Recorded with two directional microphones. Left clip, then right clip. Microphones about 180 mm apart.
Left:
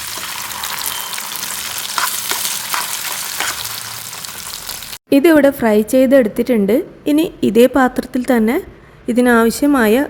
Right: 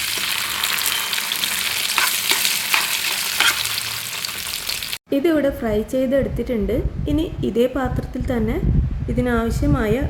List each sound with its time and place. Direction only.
3.4 s stir: 10° left (ahead or behind)
5.0 s a woman's voice: 55° left (ahead or behind)